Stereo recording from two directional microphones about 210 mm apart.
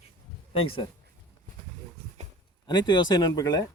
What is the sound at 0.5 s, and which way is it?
Speech, 25° left (ahead or behind).